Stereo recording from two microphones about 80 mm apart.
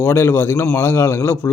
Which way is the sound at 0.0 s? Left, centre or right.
Left.